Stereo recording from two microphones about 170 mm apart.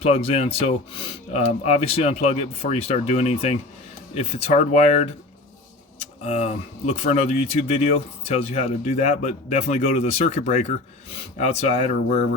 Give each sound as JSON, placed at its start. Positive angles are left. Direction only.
{"t": 0.0, "sound": "speech", "side_deg": 35}